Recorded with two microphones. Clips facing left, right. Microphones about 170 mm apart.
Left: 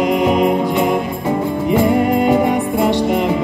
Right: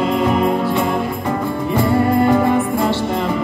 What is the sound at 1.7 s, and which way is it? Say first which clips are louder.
Music: left 2 dB; 15° left (ahead or behind).